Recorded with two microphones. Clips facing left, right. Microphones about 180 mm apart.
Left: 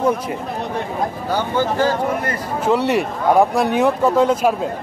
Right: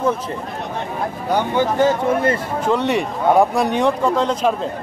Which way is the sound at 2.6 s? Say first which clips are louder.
Left 3 dB; 5° left (ahead or behind).